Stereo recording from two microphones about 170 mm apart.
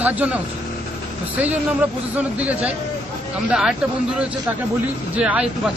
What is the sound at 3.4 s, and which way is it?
Speech, 5° right (ahead or behind).